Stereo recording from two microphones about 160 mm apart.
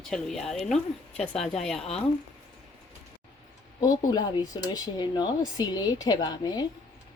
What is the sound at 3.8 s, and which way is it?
Speech, 25° left (ahead or behind).